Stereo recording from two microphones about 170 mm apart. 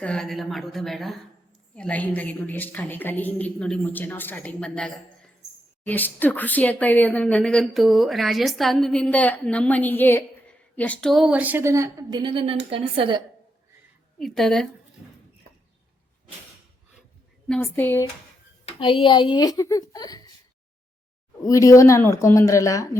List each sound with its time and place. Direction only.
0.0 s a woman's voice: 5° left (ahead or behind); by 13.2 s 30° right (ahead or behind)
14.2 s a woman's voice: centre (ahead or behind)
17.5 s speech: 15° left (ahead or behind)
18.8 s a child's voice: 30° left (ahead or behind)
21.4 s a child's voice: 20° left (ahead or behind)